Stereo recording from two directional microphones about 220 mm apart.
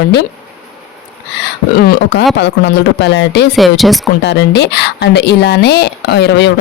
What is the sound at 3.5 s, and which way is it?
Speech, centre (ahead or behind).